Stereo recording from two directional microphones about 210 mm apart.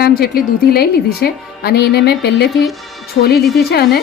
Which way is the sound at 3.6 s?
50° left (ahead or behind).